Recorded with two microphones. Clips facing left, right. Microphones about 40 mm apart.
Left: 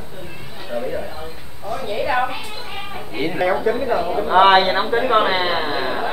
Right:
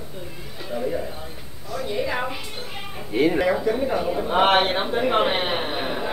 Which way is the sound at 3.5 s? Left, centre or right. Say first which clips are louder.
Left 3 dB; left.